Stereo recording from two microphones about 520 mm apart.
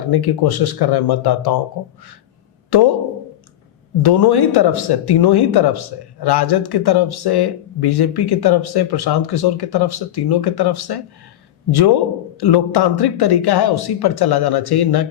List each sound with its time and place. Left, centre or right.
0.1 s speech: left
2.6 s speech: left
4.0 s speech: left
12.4 s speech: left